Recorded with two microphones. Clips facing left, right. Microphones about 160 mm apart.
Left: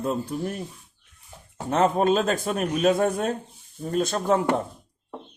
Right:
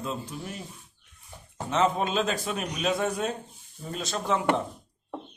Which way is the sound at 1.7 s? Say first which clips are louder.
Left 5 dB; 55° left (ahead or behind).